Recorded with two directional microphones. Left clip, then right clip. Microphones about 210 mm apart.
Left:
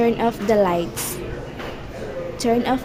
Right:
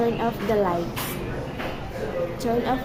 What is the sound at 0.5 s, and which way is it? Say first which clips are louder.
Speech: left 6 dB; 35° left (ahead or behind).